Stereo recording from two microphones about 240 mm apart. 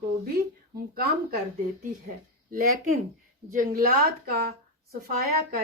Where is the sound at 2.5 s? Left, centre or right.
Right.